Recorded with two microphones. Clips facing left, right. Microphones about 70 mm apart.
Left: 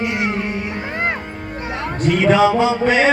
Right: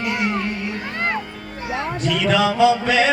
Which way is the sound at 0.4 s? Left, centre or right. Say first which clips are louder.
Left 2 dB; centre.